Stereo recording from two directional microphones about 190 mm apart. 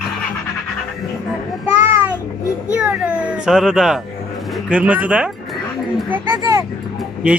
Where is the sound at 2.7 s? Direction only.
5° right (ahead or behind).